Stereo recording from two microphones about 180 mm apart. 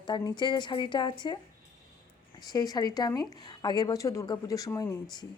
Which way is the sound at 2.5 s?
20° left (ahead or behind).